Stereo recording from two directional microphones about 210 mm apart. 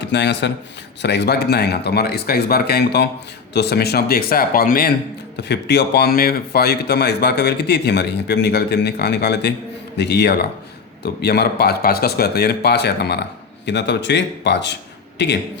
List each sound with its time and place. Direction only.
0.0 s a man's voice: 55° left (ahead or behind)